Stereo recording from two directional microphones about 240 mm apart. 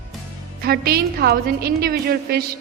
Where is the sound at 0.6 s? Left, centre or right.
Right.